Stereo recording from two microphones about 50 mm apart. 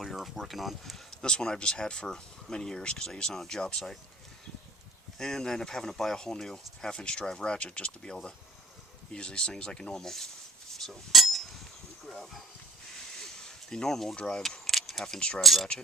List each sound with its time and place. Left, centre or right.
0.0 s speech: centre
1.2 s speech: centre
5.1 s speech: centre
10.8 s chink: centre
12.0 s hiss: centre
13.1 s a sound: centre
14.2 s speech: centre